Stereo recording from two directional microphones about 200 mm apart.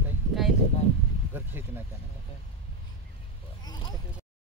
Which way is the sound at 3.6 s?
20° left (ahead or behind).